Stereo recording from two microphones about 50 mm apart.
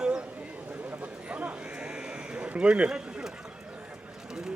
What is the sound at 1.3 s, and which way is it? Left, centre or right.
Sheep, right.